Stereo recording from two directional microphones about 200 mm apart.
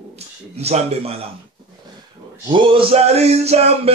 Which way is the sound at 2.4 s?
25° right (ahead or behind).